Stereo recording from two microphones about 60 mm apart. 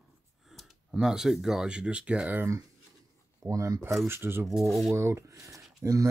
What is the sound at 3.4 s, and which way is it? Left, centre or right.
Speech, right.